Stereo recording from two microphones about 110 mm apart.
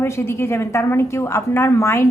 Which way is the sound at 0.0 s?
20° left (ahead or behind).